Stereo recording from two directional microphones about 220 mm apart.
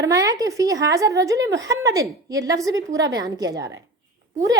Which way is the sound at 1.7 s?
15° right (ahead or behind).